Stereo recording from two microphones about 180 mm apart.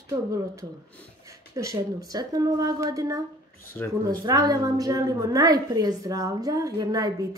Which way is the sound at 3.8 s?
10° left (ahead or behind).